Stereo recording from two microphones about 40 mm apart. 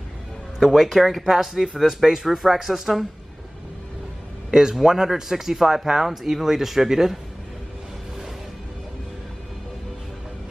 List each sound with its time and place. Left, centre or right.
0.6 s speech: centre
4.5 s a man's voice: centre